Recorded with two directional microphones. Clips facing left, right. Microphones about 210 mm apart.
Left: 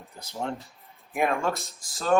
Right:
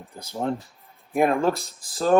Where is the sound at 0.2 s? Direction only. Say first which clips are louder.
Right 5 dB; 30° right (ahead or behind).